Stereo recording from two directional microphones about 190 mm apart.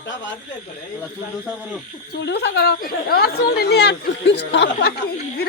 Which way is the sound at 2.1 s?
60° left (ahead or behind).